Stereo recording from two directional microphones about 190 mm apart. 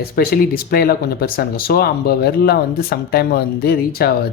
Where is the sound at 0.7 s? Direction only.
50° left (ahead or behind).